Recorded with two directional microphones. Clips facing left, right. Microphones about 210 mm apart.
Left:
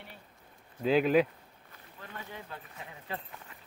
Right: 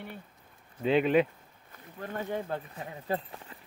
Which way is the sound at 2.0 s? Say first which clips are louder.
Right 11 dB; 45° right (ahead or behind).